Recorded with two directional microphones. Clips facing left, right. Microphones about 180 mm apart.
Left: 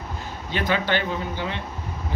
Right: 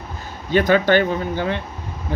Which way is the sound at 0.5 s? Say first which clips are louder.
Right 9 dB; 45° right (ahead or behind).